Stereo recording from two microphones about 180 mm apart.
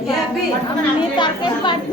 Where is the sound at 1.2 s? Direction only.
25° left (ahead or behind).